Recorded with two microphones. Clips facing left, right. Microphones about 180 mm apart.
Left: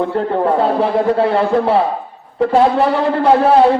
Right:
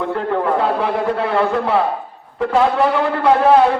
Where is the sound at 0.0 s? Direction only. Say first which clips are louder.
Left 3 dB; 35° left (ahead or behind).